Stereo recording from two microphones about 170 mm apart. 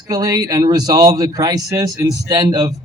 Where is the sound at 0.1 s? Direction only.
20° right (ahead or behind).